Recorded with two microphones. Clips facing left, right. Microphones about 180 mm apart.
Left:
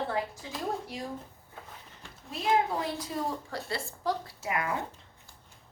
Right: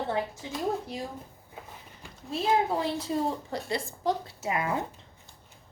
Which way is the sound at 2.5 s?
25° right (ahead or behind).